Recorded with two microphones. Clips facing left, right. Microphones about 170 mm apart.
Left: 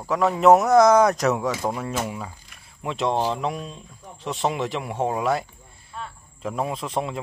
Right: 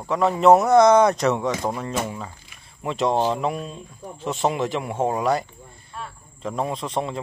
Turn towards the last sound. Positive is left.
turn(degrees=0)  # may be behind; listen again after turning